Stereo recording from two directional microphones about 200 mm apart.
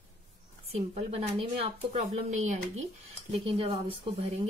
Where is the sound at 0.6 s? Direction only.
30° right (ahead or behind).